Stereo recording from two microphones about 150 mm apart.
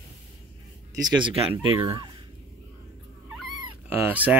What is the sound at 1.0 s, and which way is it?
Speech, 30° right (ahead or behind).